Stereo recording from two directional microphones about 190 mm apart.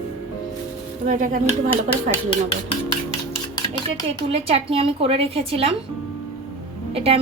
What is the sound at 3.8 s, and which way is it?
Speech, 30° right (ahead or behind).